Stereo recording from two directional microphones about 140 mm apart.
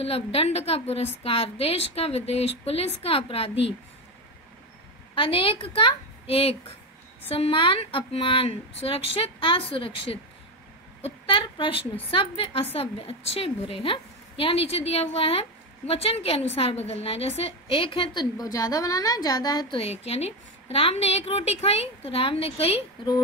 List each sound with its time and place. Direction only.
0.0 s a woman's voice: 45° left (ahead or behind)
5.1 s a woman's voice: 40° left (ahead or behind)
19.8 s a woman's voice: 45° left (ahead or behind)